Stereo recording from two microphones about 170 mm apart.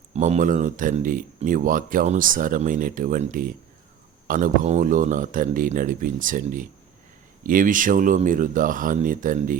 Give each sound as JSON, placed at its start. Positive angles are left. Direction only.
{"t": 0.1, "sound": "speech", "side_deg": -45}